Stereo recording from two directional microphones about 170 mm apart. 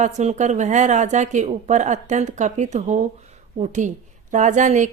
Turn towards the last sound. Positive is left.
turn(degrees=-45)  # may be behind; listen again after turning